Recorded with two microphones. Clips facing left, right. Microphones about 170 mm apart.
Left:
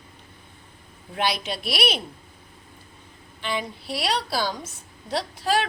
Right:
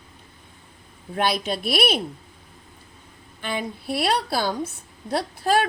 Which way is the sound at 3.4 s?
50° right (ahead or behind).